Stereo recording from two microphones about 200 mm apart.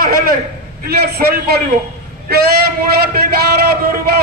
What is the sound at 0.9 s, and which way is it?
Speech, 55° right (ahead or behind).